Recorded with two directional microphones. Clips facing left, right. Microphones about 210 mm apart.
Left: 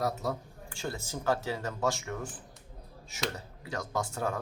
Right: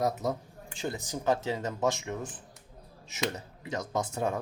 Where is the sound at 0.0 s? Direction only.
20° right (ahead or behind).